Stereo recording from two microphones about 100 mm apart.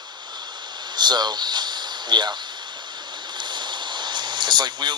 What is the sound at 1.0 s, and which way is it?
Speech, 45° right (ahead or behind).